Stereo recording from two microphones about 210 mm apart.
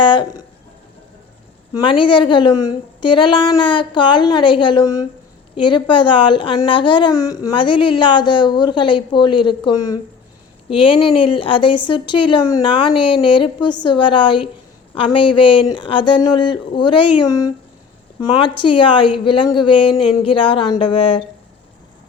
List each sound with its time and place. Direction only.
0.0 s speech: 25° left (ahead or behind)
1.7 s a woman's voice: 25° left (ahead or behind)